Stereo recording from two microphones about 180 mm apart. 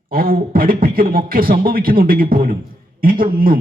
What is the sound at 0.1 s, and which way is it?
A man's voice, 55° right (ahead or behind).